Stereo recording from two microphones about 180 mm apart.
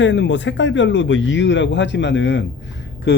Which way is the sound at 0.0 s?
90° left.